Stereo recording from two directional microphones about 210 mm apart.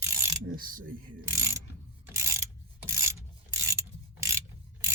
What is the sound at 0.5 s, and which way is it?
Speech, 40° right (ahead or behind).